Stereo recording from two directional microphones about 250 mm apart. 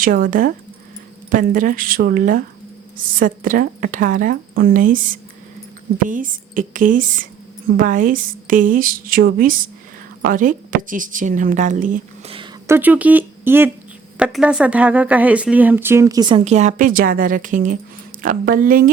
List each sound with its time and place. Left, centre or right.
0.0 s speech: right
6.1 s speech: right
12.4 s a sound: centre
14.2 s speech: centre; by 18.9 s right